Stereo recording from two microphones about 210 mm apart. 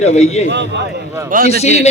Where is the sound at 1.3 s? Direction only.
45° right (ahead or behind).